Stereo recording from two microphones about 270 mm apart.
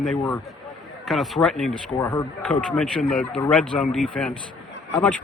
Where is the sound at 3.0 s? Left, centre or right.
Left.